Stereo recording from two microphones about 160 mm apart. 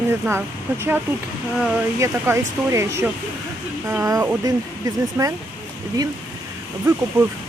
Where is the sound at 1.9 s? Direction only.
20° right (ahead or behind).